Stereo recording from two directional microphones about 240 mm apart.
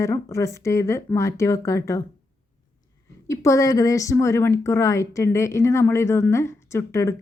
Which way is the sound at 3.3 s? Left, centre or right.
Centre.